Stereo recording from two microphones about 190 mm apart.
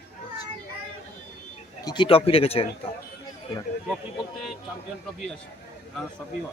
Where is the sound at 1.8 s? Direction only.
25° left (ahead or behind).